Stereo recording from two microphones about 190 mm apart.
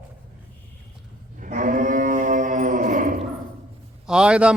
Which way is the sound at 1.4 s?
45° right (ahead or behind).